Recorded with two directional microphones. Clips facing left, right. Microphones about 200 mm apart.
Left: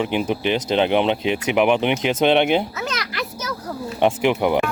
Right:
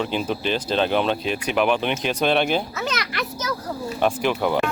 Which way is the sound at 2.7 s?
Centre (ahead or behind).